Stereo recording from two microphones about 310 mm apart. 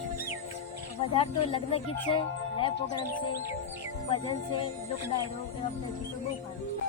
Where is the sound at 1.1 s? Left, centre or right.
Centre.